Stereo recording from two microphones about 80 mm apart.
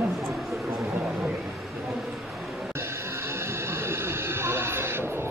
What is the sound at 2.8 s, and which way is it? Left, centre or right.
Music, right.